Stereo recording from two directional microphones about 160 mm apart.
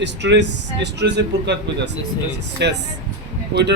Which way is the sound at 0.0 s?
90° right.